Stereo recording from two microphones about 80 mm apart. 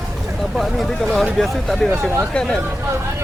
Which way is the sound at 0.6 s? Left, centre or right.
Centre.